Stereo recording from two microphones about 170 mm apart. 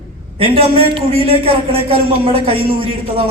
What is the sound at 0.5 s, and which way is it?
Speech, 35° right (ahead or behind).